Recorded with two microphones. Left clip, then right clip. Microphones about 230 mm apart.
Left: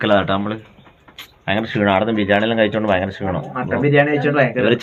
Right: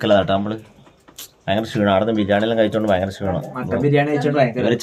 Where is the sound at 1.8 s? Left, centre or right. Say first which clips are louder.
Left 1 dB; centre.